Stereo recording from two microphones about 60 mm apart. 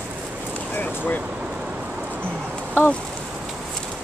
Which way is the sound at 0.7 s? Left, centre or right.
Left.